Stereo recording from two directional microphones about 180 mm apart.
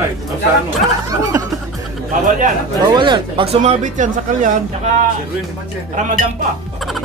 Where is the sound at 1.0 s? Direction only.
20° right (ahead or behind).